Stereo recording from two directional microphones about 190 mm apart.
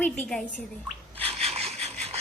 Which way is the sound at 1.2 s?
30° right (ahead or behind).